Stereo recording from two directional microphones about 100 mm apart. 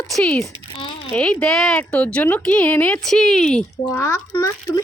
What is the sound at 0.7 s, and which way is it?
Speech, 65° left (ahead or behind).